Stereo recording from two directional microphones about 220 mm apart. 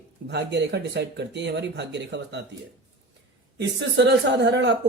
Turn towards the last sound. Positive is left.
turn(degrees=-50)  # may be behind; listen again after turning